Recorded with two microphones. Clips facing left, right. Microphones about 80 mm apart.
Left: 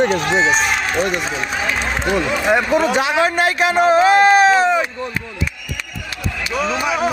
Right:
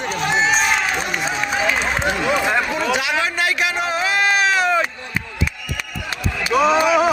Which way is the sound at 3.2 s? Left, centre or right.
Left.